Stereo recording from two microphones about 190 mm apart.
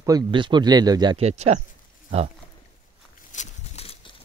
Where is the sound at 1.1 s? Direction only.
35° right (ahead or behind).